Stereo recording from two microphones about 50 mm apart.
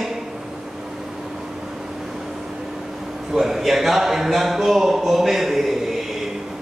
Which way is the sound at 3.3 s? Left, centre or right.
Centre.